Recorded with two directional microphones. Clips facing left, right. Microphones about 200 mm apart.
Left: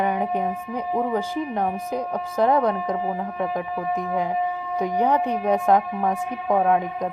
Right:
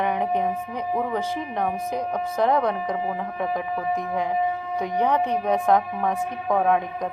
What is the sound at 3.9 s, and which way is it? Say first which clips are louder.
Speech: left 2 dB; 10° left (ahead or behind).